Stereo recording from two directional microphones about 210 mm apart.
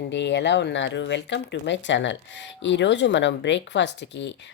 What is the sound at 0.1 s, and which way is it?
Speech, 55° left (ahead or behind).